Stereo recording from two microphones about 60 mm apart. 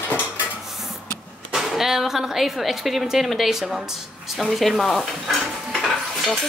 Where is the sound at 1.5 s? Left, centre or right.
Centre.